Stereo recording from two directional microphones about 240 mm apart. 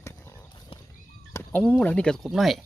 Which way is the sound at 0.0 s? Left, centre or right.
Centre.